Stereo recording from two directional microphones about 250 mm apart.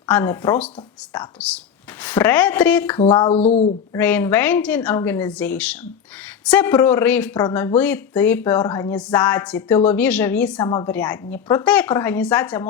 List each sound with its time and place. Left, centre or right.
0.1 s a woman's voice: centre
3.0 s speech: left
3.9 s a woman's voice: centre
10.6 s a woman's voice: centre